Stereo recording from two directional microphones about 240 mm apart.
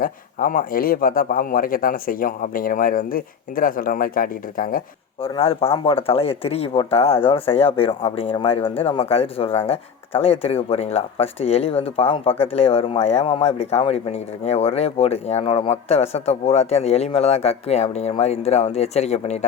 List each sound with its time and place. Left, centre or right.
0.0 s speech: left
5.2 s speech: left